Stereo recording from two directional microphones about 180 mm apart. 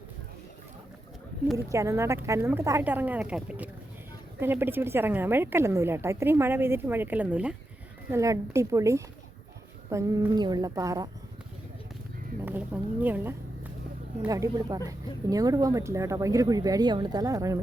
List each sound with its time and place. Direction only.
1.5 s speech: 15° right (ahead or behind)
12.5 s speech: 10° right (ahead or behind)